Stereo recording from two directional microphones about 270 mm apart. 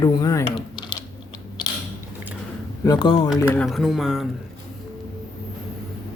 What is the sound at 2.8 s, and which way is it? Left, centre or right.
Speech, centre.